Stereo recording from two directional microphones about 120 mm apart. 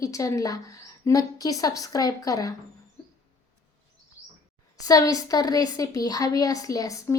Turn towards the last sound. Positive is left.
turn(degrees=30)  # may be behind; listen again after turning